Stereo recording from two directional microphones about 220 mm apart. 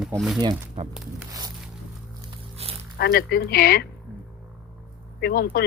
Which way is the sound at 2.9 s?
45° left (ahead or behind).